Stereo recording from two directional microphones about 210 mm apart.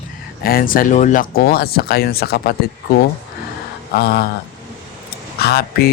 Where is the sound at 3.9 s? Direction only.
50° left (ahead or behind).